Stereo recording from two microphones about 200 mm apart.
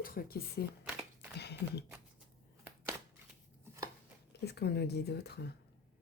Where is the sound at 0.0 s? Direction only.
45° left (ahead or behind).